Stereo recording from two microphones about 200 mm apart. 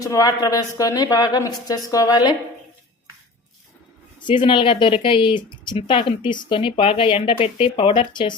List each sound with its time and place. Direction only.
0.0 s a woman's voice: 15° left (ahead or behind)
4.3 s speech: 25° left (ahead or behind)